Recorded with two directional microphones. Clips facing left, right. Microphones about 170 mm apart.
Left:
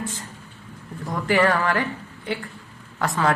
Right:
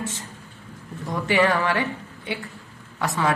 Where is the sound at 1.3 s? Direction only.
20° right (ahead or behind).